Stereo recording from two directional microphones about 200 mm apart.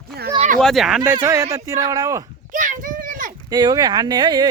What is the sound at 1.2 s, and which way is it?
Speech, 15° right (ahead or behind).